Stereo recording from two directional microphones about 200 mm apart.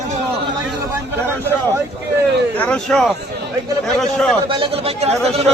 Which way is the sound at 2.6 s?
5° left (ahead or behind).